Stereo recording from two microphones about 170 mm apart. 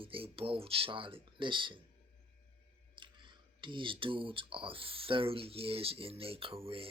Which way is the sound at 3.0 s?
30° right (ahead or behind).